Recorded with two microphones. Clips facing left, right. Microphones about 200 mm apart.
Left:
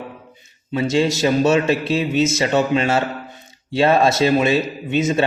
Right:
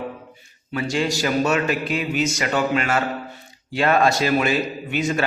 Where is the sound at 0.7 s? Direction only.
25° left (ahead or behind).